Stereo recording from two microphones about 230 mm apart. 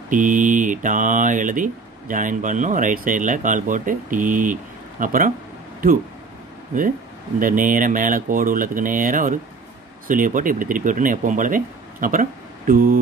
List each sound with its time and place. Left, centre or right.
0.1 s speech: right
7.3 s speech: right